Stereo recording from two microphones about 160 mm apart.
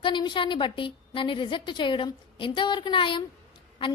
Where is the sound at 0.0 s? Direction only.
30° left (ahead or behind).